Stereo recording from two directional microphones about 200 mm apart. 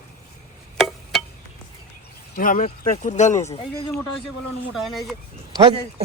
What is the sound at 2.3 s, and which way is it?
Speech, 45° left (ahead or behind).